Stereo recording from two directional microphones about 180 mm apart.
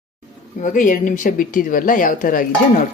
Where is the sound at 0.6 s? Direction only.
45° left (ahead or behind).